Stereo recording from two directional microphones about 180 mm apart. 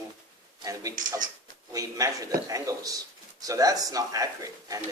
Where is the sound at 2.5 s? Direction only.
20° right (ahead or behind).